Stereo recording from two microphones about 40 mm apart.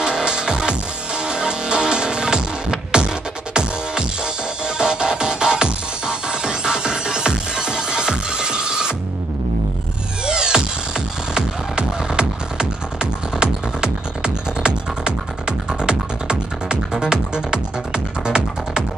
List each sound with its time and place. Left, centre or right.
0.0 s music: right
10.2 s music: right